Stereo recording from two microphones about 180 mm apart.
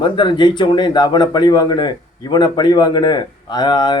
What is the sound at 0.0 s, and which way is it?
A man's voice, 25° left (ahead or behind).